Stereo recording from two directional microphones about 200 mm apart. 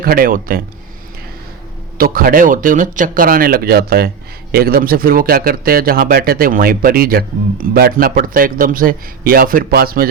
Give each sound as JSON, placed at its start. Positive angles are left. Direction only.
{"t": 0.0, "sound": "a man's voice", "side_deg": -45}
{"t": 2.0, "sound": "a man's voice", "side_deg": -45}